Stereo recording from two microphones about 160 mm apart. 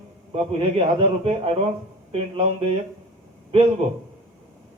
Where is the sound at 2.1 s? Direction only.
35° right (ahead or behind).